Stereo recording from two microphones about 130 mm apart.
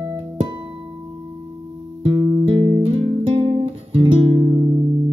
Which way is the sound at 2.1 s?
30° right (ahead or behind).